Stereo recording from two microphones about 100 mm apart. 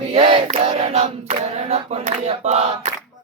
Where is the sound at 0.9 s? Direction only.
85° right.